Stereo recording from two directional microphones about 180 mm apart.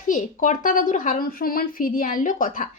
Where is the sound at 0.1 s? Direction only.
45° left (ahead or behind).